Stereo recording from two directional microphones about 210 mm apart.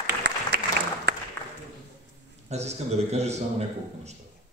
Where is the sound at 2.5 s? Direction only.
30° right (ahead or behind).